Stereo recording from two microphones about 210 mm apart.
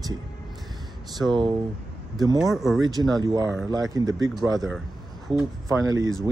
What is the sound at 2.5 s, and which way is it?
Speech, centre (ahead or behind).